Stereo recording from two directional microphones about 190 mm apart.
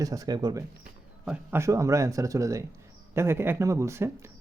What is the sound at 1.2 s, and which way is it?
Speech, 5° right (ahead or behind).